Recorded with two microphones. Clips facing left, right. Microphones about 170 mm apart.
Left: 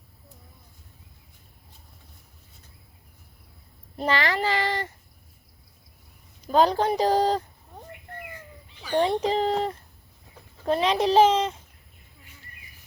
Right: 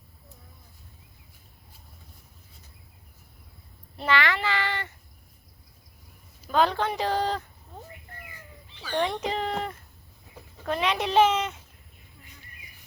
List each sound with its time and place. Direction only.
3.9 s a sound: 40° left (ahead or behind)
6.5 s speech: 40° left (ahead or behind)
9.0 s speech: 35° left (ahead or behind)